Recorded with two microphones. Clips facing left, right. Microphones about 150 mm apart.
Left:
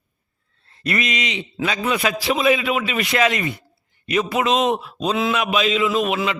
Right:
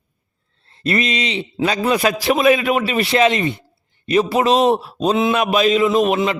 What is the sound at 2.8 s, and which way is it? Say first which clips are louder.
A man's voice: right 4 dB; 35° right (ahead or behind).